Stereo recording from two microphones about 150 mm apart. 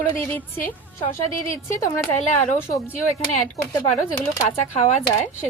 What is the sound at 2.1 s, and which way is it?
Speech, 50° left (ahead or behind).